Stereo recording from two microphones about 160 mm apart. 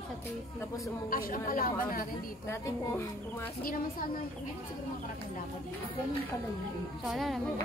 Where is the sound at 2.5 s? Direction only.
15° left (ahead or behind).